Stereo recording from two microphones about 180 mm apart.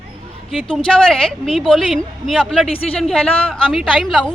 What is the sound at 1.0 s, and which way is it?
Speech, 5° left (ahead or behind).